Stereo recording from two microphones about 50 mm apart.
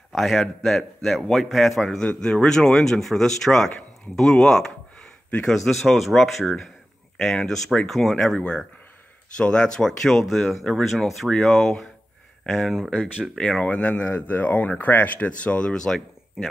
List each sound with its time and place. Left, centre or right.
0.1 s a man's voice: centre
2.0 s speech: centre
5.5 s a man's voice: centre
9.4 s speech: centre
9.8 s a man's voice: centre
13.4 s speech: left
15.7 s speech: centre
16.4 s speech: centre